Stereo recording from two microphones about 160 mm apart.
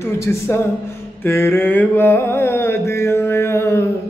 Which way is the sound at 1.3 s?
15° left (ahead or behind).